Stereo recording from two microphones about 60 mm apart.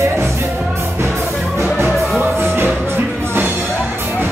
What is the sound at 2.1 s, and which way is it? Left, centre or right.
Music, right.